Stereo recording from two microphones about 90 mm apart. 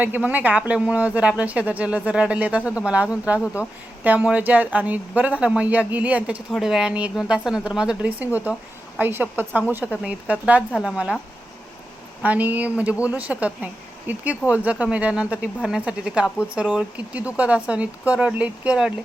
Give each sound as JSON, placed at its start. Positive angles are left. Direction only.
{"t": 0.0, "sound": "speech", "side_deg": -20}
{"t": 6.5, "sound": "a woman's voice", "side_deg": -5}
{"t": 12.2, "sound": "speech", "side_deg": -15}